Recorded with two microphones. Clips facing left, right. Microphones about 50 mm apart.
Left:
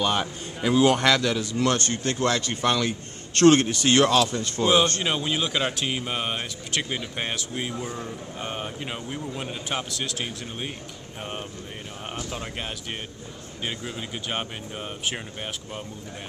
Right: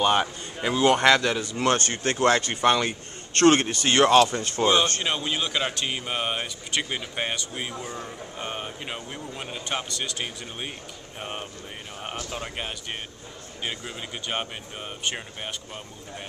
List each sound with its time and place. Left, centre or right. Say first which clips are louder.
0.0 s a man's voice: right 3 dB; centre
0.7 s speech: left 1 dB; centre
1.0 s a man's voice: right 2 dB; centre
1.8 s speech: right 1 dB; right
2.5 s a man's voice: right 2 dB; centre
4.3 s speech: even; right
5.0 s a man's voice: left 1 dB; centre